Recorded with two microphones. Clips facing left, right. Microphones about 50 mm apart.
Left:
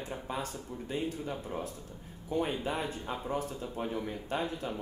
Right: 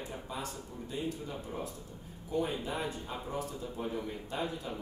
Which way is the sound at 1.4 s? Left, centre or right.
Left.